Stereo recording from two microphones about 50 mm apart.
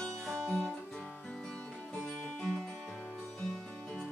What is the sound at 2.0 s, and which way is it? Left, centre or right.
Music, centre.